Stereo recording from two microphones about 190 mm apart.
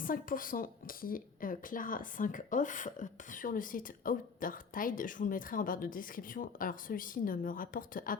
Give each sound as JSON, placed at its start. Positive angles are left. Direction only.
{"t": 0.0, "sound": "speech", "side_deg": 45}